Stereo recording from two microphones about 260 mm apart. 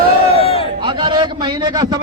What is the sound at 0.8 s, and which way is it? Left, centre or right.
A man's voice, centre.